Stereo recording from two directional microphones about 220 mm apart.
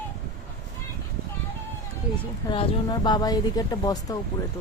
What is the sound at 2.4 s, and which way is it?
Speech, 20° left (ahead or behind).